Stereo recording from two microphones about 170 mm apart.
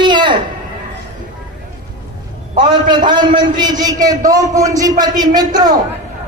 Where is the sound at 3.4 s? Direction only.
25° right (ahead or behind).